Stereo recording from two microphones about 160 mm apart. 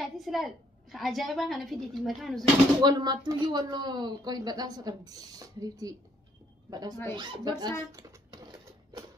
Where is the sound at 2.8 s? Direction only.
25° right (ahead or behind).